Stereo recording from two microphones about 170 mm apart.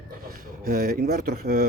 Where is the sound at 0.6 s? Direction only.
60° right (ahead or behind).